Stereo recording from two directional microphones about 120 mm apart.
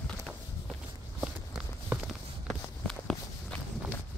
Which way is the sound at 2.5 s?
5° left (ahead or behind).